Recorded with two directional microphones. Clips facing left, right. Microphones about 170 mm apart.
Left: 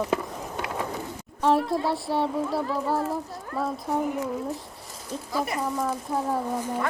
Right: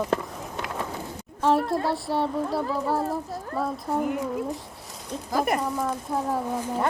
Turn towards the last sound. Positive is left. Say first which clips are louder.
# even
turn(degrees=0)  # may be behind; listen again after turning